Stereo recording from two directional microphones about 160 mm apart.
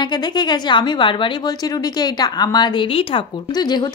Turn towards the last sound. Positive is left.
turn(degrees=25)  # may be behind; listen again after turning